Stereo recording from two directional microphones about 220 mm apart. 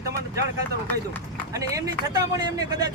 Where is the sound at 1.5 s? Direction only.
15° right (ahead or behind).